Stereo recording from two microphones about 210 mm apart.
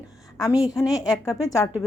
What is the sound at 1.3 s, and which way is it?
Speech, 15° left (ahead or behind).